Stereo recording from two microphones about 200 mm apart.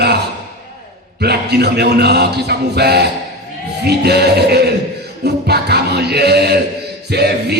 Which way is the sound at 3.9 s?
55° right (ahead or behind).